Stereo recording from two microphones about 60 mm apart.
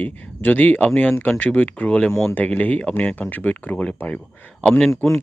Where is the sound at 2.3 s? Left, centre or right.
Left.